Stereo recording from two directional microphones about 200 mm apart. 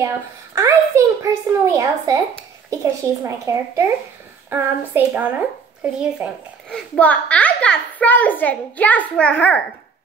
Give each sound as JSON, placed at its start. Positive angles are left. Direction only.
{"t": 0.6, "sound": "a child's voice", "side_deg": -15}
{"t": 7.0, "sound": "a child's voice", "side_deg": 5}